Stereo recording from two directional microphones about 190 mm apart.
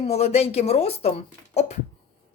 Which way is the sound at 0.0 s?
35° left (ahead or behind).